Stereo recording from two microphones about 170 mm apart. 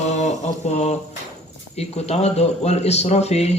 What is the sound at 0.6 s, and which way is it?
Speech, 40° left (ahead or behind).